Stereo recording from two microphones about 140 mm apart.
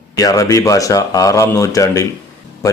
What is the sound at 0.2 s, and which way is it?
Speech, 25° left (ahead or behind).